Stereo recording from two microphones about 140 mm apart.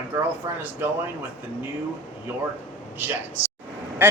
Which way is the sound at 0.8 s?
15° right (ahead or behind).